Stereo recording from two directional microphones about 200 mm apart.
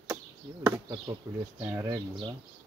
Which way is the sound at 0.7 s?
15° right (ahead or behind).